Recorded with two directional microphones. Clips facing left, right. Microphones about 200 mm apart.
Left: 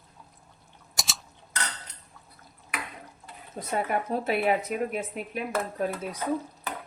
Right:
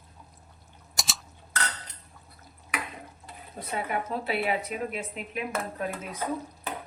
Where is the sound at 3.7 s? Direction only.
45° left (ahead or behind).